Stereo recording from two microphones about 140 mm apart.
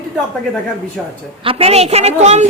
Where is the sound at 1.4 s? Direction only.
40° right (ahead or behind).